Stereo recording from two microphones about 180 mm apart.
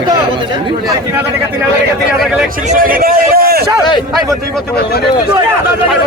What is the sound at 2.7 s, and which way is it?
Speech, 50° right (ahead or behind).